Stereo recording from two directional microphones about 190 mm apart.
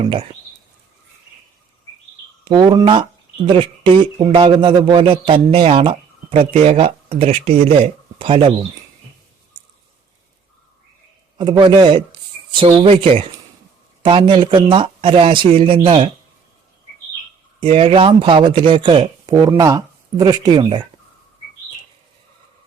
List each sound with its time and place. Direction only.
0.0 s speech: 30° right (ahead or behind)
2.4 s speech: 25° right (ahead or behind)
11.3 s speech: 25° right (ahead or behind)
17.6 s speech: 30° right (ahead or behind)